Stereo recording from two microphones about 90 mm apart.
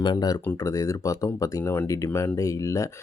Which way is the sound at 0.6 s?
40° left (ahead or behind).